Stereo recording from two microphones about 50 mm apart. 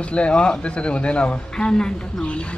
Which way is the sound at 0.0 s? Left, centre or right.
Left.